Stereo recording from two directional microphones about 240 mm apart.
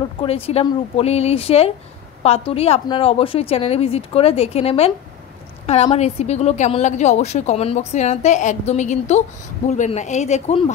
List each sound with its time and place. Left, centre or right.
0.2 s a woman's voice: left